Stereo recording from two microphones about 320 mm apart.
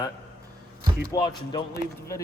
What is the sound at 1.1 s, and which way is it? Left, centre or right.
Speech, centre.